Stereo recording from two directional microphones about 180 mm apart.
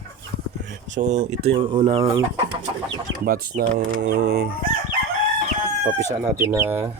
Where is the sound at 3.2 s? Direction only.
55° right (ahead or behind).